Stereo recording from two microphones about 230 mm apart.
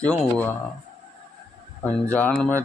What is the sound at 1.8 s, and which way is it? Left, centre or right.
Speech, centre.